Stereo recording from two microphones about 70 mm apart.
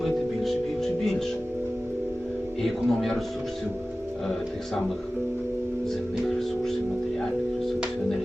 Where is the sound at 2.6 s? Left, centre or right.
Centre.